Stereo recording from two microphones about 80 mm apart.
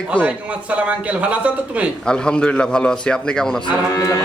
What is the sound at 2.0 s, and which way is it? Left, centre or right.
Speech, centre.